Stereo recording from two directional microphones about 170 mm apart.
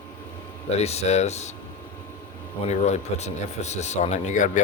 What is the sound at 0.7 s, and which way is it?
Speech, 40° left (ahead or behind).